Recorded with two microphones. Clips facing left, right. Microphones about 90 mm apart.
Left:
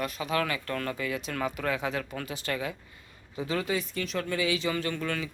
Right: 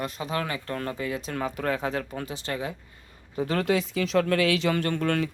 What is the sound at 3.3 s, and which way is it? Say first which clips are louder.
Speech: right 5 dB; 50° right (ahead or behind).